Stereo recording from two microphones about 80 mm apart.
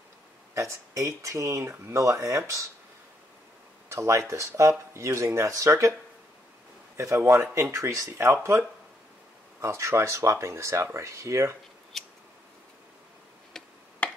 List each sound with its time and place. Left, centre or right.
0.6 s speech: right
3.9 s speech: right
7.5 s speech: right
11.9 s scissors: centre
13.5 s tick-tock: centre
14.0 s tick-tock: centre